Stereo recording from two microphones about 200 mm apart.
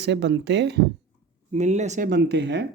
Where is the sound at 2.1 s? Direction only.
55° right (ahead or behind).